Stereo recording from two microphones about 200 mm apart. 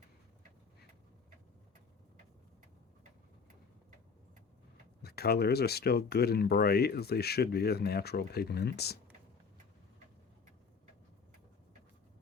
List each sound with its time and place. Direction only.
5.0 s speech: 50° left (ahead or behind)